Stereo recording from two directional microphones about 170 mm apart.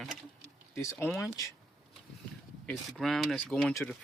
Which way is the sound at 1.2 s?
20° left (ahead or behind).